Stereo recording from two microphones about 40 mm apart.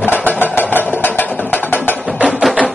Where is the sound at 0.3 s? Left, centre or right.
Left.